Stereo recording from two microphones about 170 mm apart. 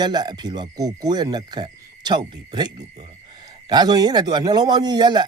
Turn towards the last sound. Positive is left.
turn(degrees=-25)  # may be behind; listen again after turning